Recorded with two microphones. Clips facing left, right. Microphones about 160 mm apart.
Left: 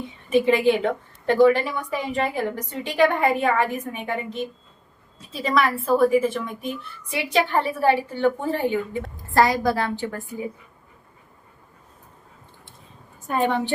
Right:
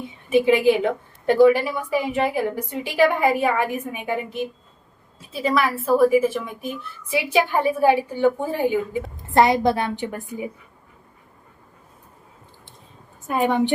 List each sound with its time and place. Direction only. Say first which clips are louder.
0.3 s a woman's voice: right 2 dB; 5° right (ahead or behind)
9.1 s a woman's voice: right 2 dB; 20° right (ahead or behind)
13.2 s a woman's voice: right 2 dB; 10° right (ahead or behind)